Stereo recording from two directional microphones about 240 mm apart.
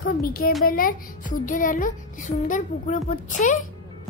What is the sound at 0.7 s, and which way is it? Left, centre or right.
Speech, left.